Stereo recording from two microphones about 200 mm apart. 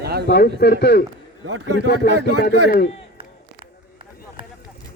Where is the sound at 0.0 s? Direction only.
50° right (ahead or behind).